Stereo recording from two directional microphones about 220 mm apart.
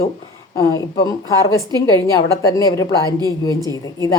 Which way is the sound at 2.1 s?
15° left (ahead or behind).